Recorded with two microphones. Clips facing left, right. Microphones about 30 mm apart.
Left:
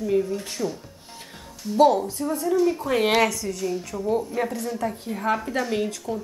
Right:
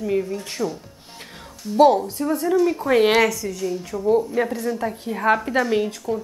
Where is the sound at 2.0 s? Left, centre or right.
Right.